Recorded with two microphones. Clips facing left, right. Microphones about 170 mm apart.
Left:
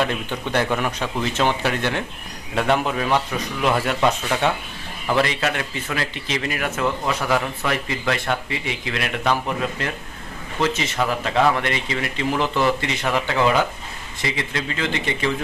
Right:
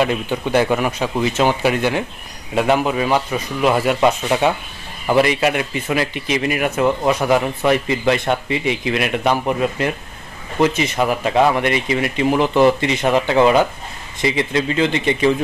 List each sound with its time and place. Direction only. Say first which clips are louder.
0.0 s speech: right 5 dB; 10° right (ahead or behind)